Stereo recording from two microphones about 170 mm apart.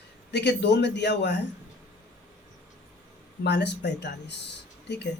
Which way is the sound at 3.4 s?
90° left.